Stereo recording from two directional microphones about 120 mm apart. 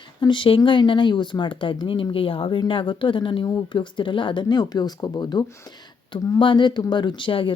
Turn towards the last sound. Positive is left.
turn(degrees=45)  # may be behind; listen again after turning